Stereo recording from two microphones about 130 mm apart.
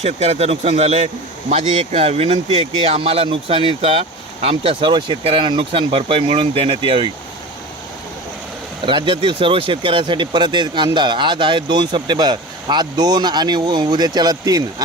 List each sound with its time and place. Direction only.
0.0 s speech: 55° right (ahead or behind)
8.9 s speech: 40° right (ahead or behind)